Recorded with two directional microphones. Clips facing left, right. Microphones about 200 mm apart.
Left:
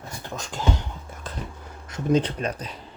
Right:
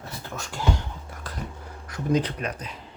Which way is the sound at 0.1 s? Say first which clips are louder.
Left 2 dB; 15° left (ahead or behind).